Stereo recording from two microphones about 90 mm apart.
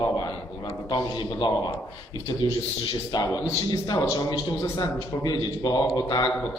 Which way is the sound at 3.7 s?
50° left (ahead or behind).